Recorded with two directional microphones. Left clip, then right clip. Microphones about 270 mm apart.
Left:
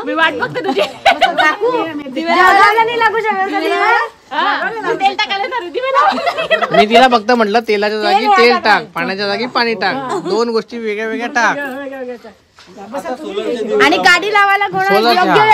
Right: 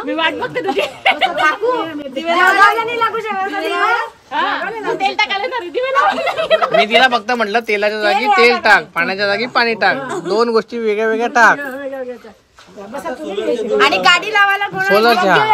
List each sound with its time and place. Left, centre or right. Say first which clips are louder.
0.1 s speech: left 3 dB; centre
1.3 s speech: left 2 dB; left
4.4 s speech: left 3 dB; centre
6.9 s speech: left 3 dB; left; by 11.5 s centre
13.7 s speech: left 2 dB; left
14.9 s speech: right 1 dB; centre